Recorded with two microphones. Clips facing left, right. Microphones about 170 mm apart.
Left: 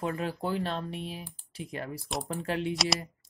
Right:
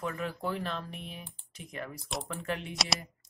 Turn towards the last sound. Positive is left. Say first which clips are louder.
# left 4 dB
turn(degrees=0)  # may be behind; listen again after turning